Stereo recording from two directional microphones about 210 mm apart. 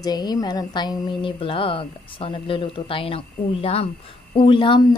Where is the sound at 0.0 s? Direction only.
20° left (ahead or behind).